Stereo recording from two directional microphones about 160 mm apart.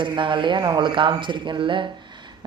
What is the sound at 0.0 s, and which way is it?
Speech, 30° right (ahead or behind).